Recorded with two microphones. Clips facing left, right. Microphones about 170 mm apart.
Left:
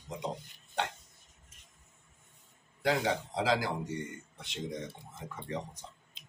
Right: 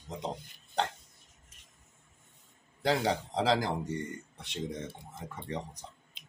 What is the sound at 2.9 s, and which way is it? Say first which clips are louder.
Speech: right 1 dB; 35° right (ahead or behind).